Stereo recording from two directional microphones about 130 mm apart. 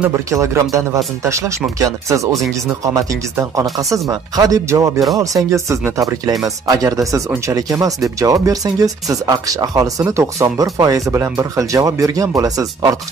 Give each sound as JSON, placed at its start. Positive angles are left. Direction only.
{"t": 0.3, "sound": "speech", "side_deg": -20}